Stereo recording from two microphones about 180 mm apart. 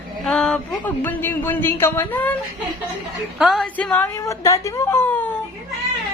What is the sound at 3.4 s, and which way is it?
A woman's voice, centre (ahead or behind).